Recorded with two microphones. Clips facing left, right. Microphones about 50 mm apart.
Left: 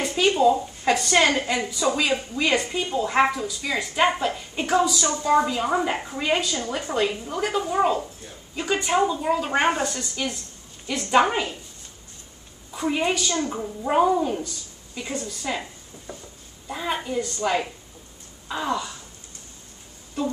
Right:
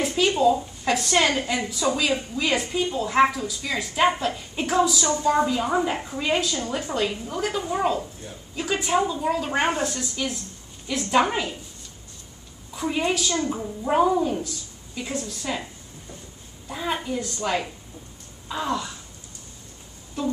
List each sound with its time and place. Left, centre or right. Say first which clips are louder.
0.2 s a woman's voice: left 2 dB; centre
12.7 s a woman's voice: left 1 dB; centre
16.6 s a woman's voice: even; centre